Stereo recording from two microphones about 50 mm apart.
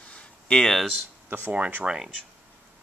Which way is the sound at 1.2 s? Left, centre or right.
Right.